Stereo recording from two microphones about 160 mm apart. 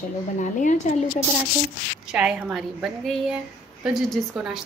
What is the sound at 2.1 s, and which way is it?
A woman's voice, 5° right (ahead or behind).